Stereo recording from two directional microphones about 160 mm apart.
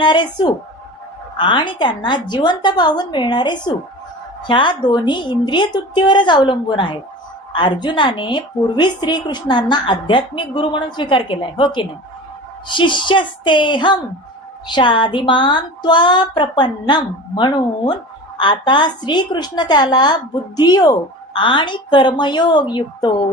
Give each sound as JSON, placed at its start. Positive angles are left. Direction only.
{"t": 0.0, "sound": "a woman's voice", "side_deg": 30}